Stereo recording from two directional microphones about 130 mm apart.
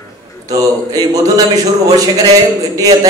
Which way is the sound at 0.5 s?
30° right (ahead or behind).